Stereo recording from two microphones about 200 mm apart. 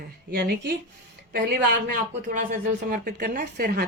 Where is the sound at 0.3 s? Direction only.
50° right (ahead or behind).